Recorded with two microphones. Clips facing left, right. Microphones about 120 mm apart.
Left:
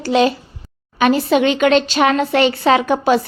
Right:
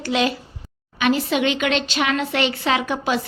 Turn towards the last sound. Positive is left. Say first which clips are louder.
# left 7 dB
turn(degrees=40)  # may be behind; listen again after turning